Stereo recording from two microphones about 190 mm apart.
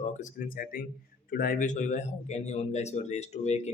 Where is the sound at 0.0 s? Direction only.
40° left (ahead or behind).